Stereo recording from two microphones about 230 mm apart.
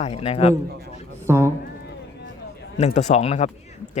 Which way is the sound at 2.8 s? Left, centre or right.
Left.